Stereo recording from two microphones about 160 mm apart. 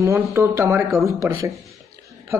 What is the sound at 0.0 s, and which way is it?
Speech, 15° right (ahead or behind).